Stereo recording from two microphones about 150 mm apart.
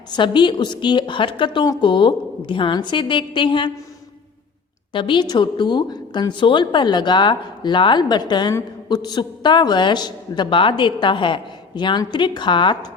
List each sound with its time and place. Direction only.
0.1 s a woman's voice: 30° left (ahead or behind)
4.9 s a woman's voice: 35° left (ahead or behind)